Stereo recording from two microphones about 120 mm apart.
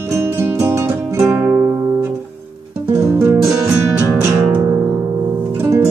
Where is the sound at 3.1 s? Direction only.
20° right (ahead or behind).